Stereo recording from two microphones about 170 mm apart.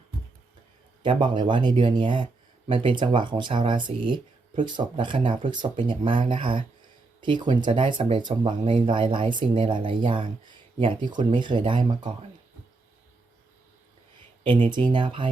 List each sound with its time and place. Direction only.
1.0 s speech: 30° right (ahead or behind)
14.9 s speech: 30° right (ahead or behind)